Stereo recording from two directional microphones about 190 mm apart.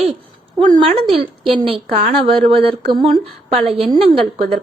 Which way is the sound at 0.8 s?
30° right (ahead or behind).